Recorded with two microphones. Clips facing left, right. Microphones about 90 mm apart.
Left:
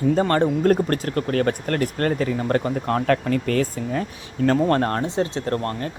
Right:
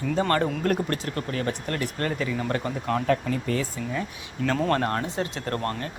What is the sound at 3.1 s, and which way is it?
Speech, 70° left (ahead or behind).